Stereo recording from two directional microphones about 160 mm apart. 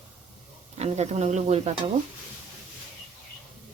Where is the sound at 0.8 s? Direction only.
45° right (ahead or behind).